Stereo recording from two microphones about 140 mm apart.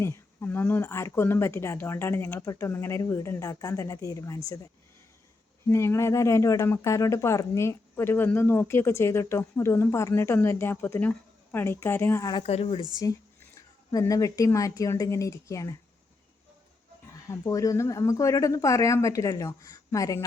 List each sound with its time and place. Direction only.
0.0 s speech: 20° left (ahead or behind)
5.6 s speech: 20° left (ahead or behind)
12.3 s speech: 45° left (ahead or behind)
13.0 s speech: 25° left (ahead or behind)
17.2 s speech: 25° left (ahead or behind)